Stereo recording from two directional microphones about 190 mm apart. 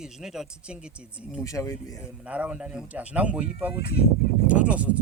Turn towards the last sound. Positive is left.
turn(degrees=-5)  # may be behind; listen again after turning